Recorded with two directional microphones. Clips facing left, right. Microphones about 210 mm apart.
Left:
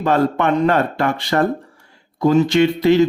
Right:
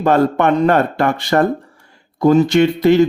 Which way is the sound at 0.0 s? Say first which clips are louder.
Right 3 dB; 50° right (ahead or behind).